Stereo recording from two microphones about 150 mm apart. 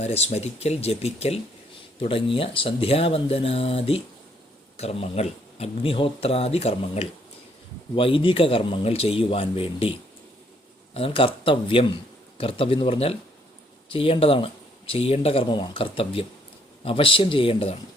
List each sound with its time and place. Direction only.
0.0 s speech: 45° left (ahead or behind)
10.9 s speech: 35° left (ahead or behind)